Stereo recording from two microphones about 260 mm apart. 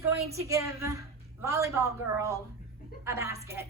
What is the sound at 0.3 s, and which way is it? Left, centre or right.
A woman's voice, centre.